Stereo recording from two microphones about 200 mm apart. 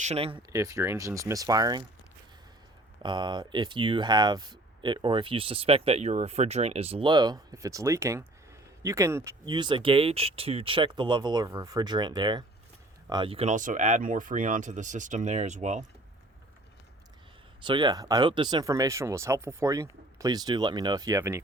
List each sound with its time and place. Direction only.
0.0 s speech: 30° right (ahead or behind)
0.5 s speech: 15° right (ahead or behind)
3.0 s speech: 20° right (ahead or behind); by 15.9 s 35° right (ahead or behind)
17.6 s speech: 25° right (ahead or behind)